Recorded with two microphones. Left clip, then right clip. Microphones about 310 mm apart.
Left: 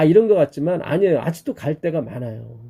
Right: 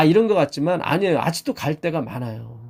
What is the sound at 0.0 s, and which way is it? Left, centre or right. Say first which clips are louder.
Speech: left 2 dB; centre.